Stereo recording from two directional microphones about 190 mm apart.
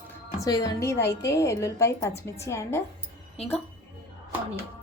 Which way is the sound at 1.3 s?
15° left (ahead or behind).